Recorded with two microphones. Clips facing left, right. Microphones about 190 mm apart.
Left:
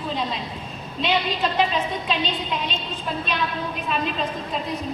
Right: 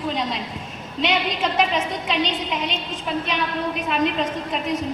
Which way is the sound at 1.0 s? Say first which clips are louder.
Right 1 dB; 90° right.